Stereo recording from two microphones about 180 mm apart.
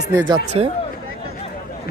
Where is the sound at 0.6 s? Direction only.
35° right (ahead or behind).